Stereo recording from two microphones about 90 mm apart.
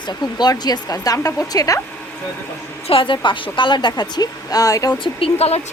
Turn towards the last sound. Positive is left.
turn(degrees=90)